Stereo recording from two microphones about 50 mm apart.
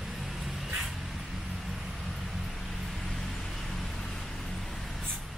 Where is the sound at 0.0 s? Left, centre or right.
Centre.